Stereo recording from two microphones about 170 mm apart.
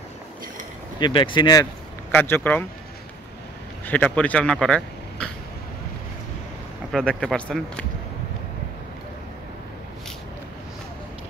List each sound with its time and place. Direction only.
0.9 s speech: 30° left (ahead or behind)
2.0 s speech: 15° left (ahead or behind)
3.8 s speech: 10° left (ahead or behind)
6.9 s speech: 5° left (ahead or behind)